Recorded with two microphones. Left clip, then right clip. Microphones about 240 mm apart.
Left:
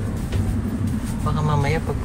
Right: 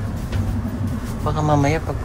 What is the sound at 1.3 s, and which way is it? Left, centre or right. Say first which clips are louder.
Speech: right 5 dB; centre.